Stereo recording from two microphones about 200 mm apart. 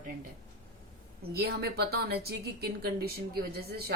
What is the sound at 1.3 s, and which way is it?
A woman's voice, 50° right (ahead or behind).